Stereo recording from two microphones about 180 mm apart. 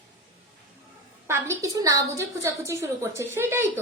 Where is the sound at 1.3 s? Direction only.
15° right (ahead or behind).